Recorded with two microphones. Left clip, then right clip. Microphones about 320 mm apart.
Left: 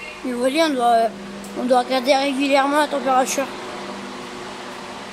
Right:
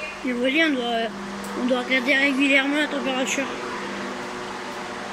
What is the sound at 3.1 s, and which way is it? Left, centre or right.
Speech, left.